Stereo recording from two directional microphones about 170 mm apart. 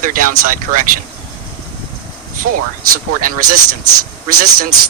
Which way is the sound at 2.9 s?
55° right (ahead or behind).